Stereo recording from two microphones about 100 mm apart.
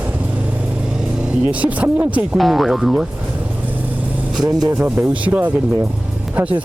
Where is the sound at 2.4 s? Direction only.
Centre (ahead or behind).